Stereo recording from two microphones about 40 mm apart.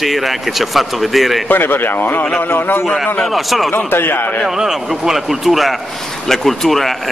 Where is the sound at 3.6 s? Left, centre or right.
Left.